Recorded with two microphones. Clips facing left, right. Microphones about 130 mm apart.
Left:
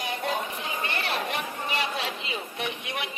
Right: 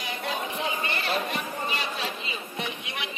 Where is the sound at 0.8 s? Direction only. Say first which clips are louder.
Right 1 dB; 75° left (ahead or behind).